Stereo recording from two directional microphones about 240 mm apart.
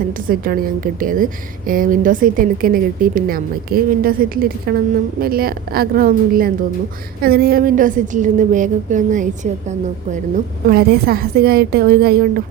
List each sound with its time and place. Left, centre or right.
0.3 s a woman's voice: right